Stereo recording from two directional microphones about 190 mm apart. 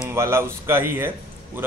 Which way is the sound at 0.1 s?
15° right (ahead or behind).